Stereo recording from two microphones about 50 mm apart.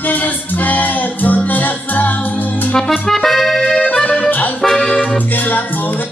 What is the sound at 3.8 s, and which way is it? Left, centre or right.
Accordion, left.